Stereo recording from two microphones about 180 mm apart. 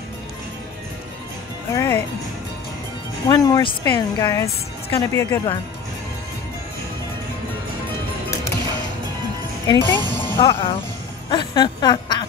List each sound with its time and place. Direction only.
1.7 s speech: 15° left (ahead or behind)
3.3 s speech: 20° left (ahead or behind)
9.7 s speech: 15° left (ahead or behind)
10.4 s speech: 25° left (ahead or behind)